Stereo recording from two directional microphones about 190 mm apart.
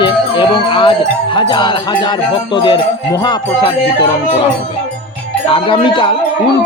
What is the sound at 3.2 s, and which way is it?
Speech, 20° left (ahead or behind).